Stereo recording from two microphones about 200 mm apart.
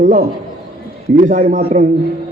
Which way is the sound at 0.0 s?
40° right (ahead or behind).